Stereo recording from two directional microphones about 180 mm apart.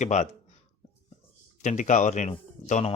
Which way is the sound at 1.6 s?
40° left (ahead or behind).